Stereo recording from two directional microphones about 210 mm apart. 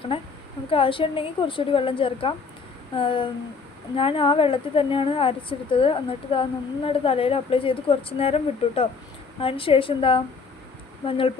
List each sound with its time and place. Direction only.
0.1 s a woman's voice: 25° left (ahead or behind)